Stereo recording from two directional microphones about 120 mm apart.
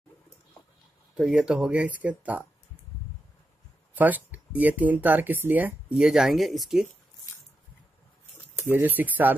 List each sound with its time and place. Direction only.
1.1 s speech: 5° right (ahead or behind)
3.9 s speech: 15° right (ahead or behind)
8.6 s speech: 20° right (ahead or behind)